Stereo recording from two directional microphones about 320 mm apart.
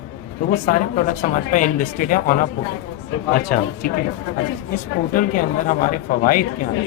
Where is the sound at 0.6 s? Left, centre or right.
Left.